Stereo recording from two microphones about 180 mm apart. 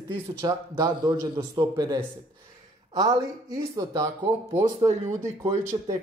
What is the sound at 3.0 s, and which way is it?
Speech, 20° right (ahead or behind).